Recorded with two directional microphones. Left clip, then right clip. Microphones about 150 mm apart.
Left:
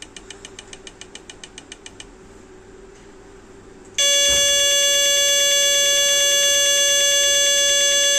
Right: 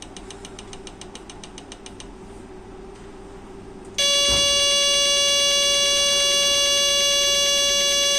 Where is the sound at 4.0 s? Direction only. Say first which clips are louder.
Left 2 dB; 20° left (ahead or behind).